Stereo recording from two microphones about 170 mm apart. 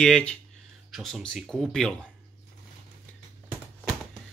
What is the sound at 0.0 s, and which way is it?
Speech, 5° left (ahead or behind).